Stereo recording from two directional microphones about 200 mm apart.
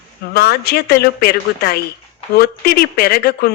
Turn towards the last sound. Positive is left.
turn(degrees=55)  # may be behind; listen again after turning